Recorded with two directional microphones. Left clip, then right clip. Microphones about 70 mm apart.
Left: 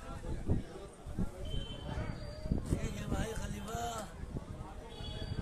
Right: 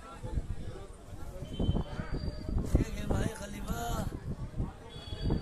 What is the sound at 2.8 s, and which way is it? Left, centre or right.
Music, right.